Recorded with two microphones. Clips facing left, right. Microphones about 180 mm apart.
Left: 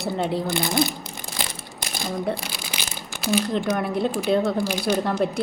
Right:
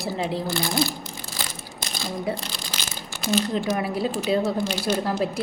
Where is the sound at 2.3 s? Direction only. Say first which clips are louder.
Left 1 dB; 10° left (ahead or behind).